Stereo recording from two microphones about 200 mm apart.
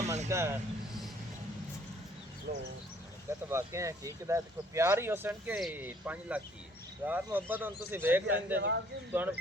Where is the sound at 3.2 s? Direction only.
15° right (ahead or behind).